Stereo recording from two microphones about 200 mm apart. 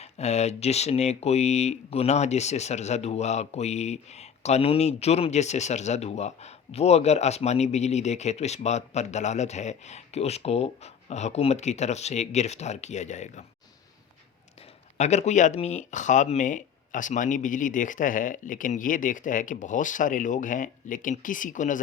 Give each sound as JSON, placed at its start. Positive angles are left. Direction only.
{"t": 0.0, "sound": "speech", "side_deg": 35}
{"t": 14.9, "sound": "speech", "side_deg": 35}